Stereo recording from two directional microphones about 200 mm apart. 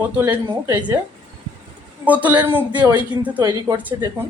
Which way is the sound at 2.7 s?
20° right (ahead or behind).